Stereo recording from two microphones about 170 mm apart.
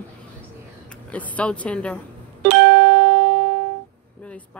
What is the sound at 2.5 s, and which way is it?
Music, 90° right.